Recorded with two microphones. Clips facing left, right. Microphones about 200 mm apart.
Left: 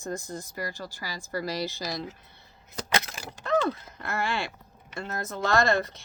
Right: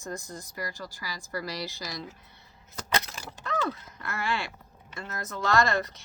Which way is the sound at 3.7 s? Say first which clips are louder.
Left 3 dB; 25° left (ahead or behind).